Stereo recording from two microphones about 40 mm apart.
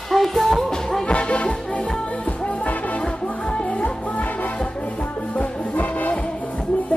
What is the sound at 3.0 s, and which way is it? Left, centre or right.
Music, left.